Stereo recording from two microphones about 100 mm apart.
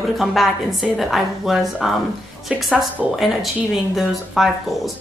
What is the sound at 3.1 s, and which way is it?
Speech, centre (ahead or behind).